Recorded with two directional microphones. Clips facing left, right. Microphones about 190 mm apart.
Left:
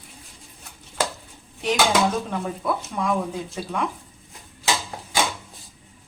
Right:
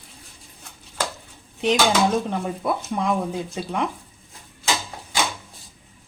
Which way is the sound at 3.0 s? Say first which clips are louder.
Even; 20° right (ahead or behind).